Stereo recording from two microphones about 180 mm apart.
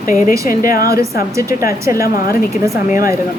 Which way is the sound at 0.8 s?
15° right (ahead or behind).